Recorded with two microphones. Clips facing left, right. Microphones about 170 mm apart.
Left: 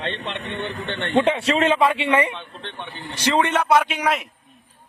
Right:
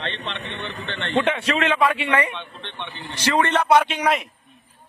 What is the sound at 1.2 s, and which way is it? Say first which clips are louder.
Speech: left 3 dB; 30° left (ahead or behind).